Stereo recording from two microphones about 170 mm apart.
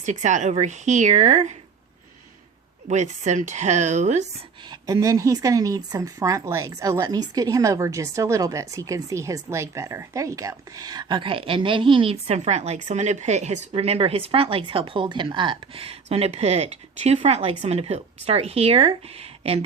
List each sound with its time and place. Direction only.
0.0 s speech: 45° right (ahead or behind)
2.9 s speech: 45° right (ahead or behind)
4.7 s speech: 20° right (ahead or behind); by 19.5 s 35° right (ahead or behind)